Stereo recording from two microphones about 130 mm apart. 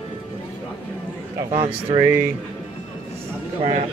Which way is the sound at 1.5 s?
45° right (ahead or behind).